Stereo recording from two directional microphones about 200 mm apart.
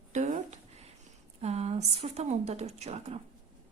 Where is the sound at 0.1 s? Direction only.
35° right (ahead or behind).